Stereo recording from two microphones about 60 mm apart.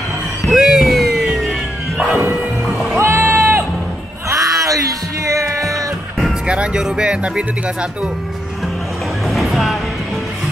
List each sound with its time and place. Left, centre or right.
0.5 s music: centre
3.0 s music: right
4.3 s music: right
6.4 s speech: centre
9.3 s music: centre